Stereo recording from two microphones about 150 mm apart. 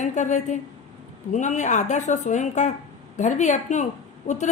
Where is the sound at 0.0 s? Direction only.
55° left (ahead or behind).